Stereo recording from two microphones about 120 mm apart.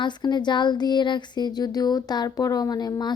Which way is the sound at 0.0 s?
40° left (ahead or behind).